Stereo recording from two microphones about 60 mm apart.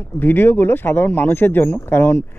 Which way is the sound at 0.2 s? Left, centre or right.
Left.